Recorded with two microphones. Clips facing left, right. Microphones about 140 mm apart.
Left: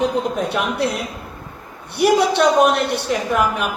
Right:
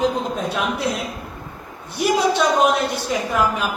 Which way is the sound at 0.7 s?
70° left (ahead or behind).